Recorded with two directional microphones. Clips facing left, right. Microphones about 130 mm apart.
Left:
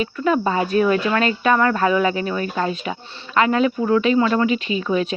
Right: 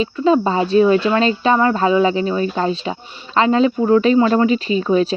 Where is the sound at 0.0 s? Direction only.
25° right (ahead or behind).